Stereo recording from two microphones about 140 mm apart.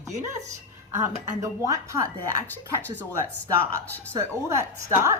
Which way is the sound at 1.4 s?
25° right (ahead or behind).